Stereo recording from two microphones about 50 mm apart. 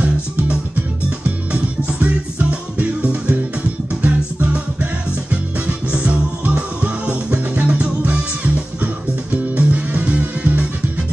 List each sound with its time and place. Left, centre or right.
0.0 s music: right